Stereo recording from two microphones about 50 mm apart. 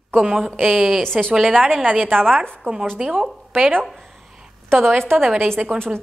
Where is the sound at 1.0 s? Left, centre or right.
Centre.